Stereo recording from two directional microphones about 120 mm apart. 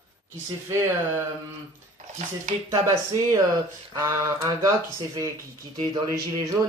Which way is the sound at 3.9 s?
25° right (ahead or behind).